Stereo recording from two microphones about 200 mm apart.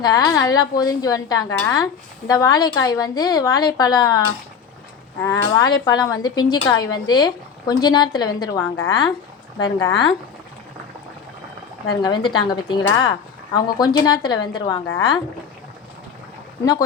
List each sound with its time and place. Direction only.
0.0 s a woman's voice: 20° left (ahead or behind)
5.2 s a woman's voice: 15° left (ahead or behind)
11.9 s a woman's voice: 20° left (ahead or behind)